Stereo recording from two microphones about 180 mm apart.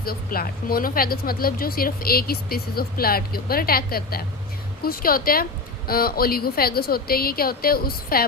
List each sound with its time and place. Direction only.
0.0 s speech: 55° left (ahead or behind)